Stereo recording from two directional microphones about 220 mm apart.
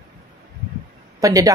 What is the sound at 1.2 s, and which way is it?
Speech, 15° right (ahead or behind).